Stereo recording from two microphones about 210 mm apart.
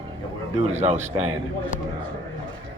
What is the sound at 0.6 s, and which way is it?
Speech, 30° right (ahead or behind).